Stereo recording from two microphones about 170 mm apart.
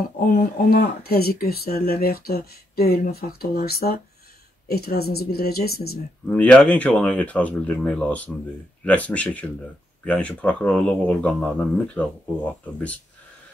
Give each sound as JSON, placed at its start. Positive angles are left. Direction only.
{"t": 0.2, "sound": "speech", "side_deg": 55}
{"t": 6.2, "sound": "speech", "side_deg": 5}